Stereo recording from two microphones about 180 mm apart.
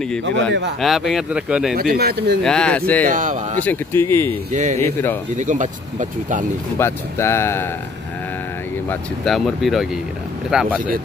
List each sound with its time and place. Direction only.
0.5 s speech: 75° right (ahead or behind)
0.7 s speech: centre (ahead or behind)
1.8 s speech: 60° right (ahead or behind)
2.4 s speech: 5° left (ahead or behind)
3.1 s speech: 45° right (ahead or behind)
3.6 s speech: 15° left (ahead or behind)
4.5 s speech: 40° right (ahead or behind)
6.8 s speech: 15° left (ahead or behind)
8.8 s speech: centre (ahead or behind)